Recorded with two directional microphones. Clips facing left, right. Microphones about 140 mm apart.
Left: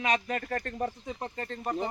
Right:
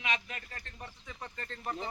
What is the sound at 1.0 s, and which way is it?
Speech, 40° left (ahead or behind).